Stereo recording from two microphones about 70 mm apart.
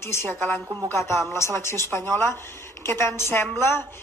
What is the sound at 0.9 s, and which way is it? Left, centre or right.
A woman's voice, left.